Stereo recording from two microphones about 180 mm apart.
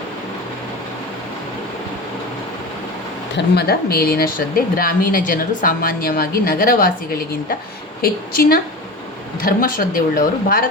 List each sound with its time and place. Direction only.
3.3 s speech: 60° left (ahead or behind)